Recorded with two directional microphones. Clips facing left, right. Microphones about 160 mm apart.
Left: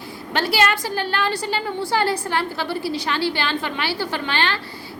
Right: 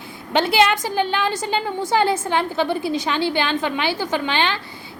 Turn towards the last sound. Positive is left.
turn(degrees=-15)  # may be behind; listen again after turning